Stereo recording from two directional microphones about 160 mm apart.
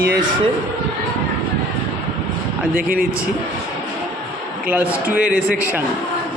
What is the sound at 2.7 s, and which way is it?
Speech, 65° right (ahead or behind).